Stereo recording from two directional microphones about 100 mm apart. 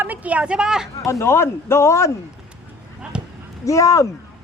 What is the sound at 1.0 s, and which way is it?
Speech, 30° left (ahead or behind).